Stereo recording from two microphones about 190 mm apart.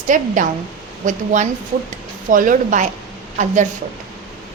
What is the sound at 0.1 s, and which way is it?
A woman's voice, 45° right (ahead or behind).